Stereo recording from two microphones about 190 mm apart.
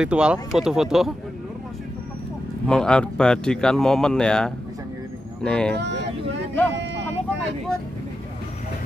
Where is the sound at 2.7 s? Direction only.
5° left (ahead or behind).